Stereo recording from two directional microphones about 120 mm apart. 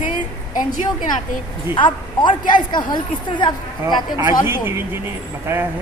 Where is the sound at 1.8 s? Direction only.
40° left (ahead or behind).